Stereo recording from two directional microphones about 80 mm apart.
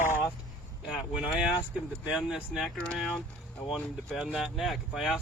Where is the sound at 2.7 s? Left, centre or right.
Centre.